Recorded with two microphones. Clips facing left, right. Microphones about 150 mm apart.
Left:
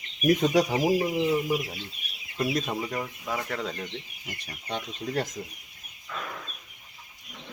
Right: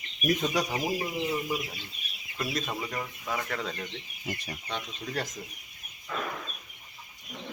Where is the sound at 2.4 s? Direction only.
20° left (ahead or behind).